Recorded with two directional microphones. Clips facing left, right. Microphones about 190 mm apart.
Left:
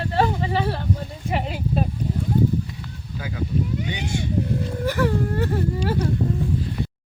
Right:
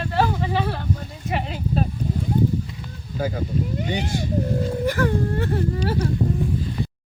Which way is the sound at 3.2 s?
45° right (ahead or behind).